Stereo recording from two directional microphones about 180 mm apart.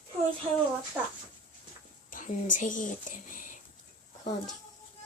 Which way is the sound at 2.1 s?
45° left (ahead or behind).